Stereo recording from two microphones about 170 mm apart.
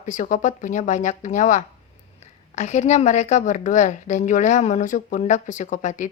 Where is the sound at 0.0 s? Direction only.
45° left (ahead or behind).